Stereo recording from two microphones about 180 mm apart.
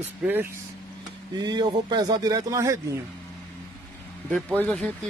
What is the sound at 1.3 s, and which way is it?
Speech, 25° right (ahead or behind).